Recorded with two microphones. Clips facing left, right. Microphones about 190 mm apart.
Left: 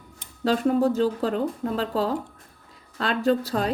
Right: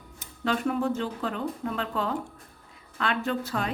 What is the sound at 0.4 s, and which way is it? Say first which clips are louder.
A woman's voice: left 6 dB; 35° left (ahead or behind).